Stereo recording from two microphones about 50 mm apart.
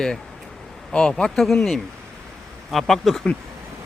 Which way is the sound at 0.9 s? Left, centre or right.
Centre.